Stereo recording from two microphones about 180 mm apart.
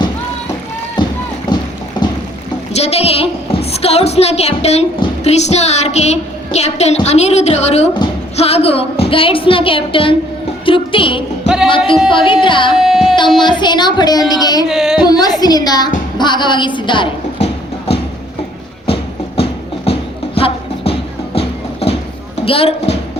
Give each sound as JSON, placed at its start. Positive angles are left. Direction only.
{"t": 1.0, "sound": "run", "side_deg": 25}
{"t": 2.7, "sound": "a woman's voice", "side_deg": 35}
{"t": 11.4, "sound": "music", "side_deg": 0}
{"t": 12.0, "sound": "a woman's voice", "side_deg": 30}
{"t": 12.7, "sound": "music", "side_deg": 0}
{"t": 13.6, "sound": "a woman's voice", "side_deg": 25}
{"t": 14.7, "sound": "speech", "side_deg": 0}
{"t": 15.0, "sound": "a woman's voice", "side_deg": 20}
{"t": 19.4, "sound": "music", "side_deg": 35}
{"t": 22.4, "sound": "a woman's voice", "side_deg": 30}